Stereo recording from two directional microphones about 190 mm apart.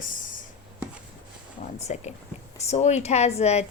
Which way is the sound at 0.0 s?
45° left (ahead or behind).